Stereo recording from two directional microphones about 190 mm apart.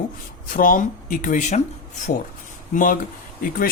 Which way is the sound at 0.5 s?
45° left (ahead or behind).